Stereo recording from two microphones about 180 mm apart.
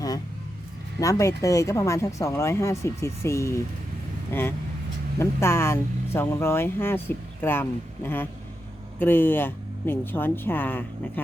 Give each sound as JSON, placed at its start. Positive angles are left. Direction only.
{"t": 0.9, "sound": "speech", "side_deg": 15}